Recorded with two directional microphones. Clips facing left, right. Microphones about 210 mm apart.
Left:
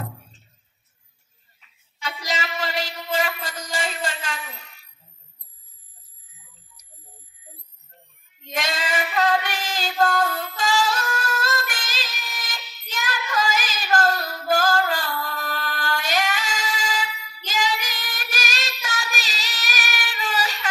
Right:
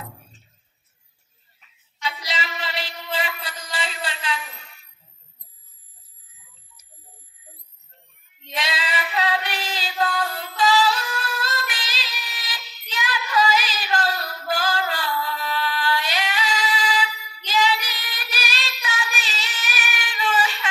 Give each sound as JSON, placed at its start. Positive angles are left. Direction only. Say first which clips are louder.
{"t": 2.0, "sound": "music", "louder": "left 1 dB", "side_deg": 45}
{"t": 8.5, "sound": "female singing", "louder": "left 2 dB", "side_deg": 45}
{"t": 17.5, "sound": "child singing", "louder": "right 3 dB", "side_deg": 45}